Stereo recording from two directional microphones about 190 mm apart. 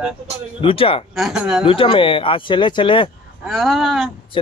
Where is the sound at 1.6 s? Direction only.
30° left (ahead or behind).